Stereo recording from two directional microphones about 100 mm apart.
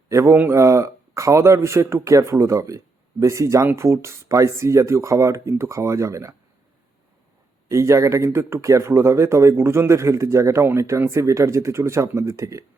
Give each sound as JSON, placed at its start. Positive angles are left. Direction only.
{"t": 0.1, "sound": "speech", "side_deg": -30}
{"t": 7.7, "sound": "speech", "side_deg": -30}